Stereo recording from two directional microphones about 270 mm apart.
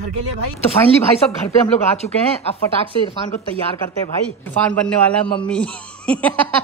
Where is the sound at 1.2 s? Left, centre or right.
Left.